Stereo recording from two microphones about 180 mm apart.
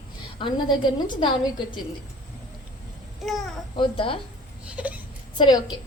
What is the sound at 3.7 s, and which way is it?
Speech, 30° left (ahead or behind).